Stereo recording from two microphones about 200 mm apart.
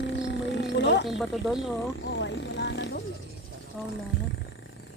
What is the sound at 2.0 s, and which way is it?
Vehicle, 60° left (ahead or behind).